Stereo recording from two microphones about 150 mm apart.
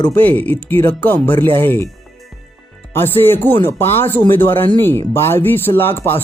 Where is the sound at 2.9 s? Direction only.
15° left (ahead or behind).